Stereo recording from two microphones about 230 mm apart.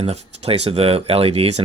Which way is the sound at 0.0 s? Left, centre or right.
Right.